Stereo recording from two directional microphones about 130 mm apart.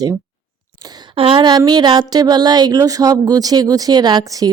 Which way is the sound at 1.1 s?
40° right (ahead or behind).